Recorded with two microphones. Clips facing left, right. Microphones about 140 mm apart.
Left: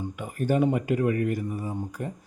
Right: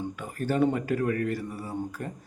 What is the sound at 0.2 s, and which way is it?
Speech, 15° left (ahead or behind).